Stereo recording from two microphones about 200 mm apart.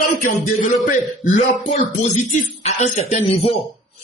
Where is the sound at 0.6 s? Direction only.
35° left (ahead or behind).